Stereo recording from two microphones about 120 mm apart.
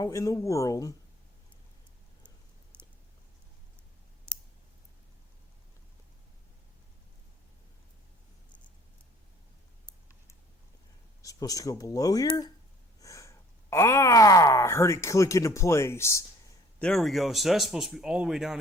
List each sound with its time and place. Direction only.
0.0 s speech: 25° left (ahead or behind)
2.7 s chewing: 10° left (ahead or behind)
4.3 s clicking: 10° left (ahead or behind)
11.2 s speech: 30° left (ahead or behind)
16.8 s speech: centre (ahead or behind)